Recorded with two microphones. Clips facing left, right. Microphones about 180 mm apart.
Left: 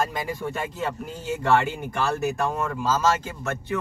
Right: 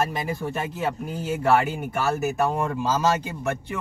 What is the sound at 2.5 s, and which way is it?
Speech, 15° right (ahead or behind).